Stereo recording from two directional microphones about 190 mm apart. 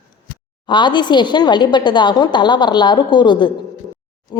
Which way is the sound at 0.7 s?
25° left (ahead or behind).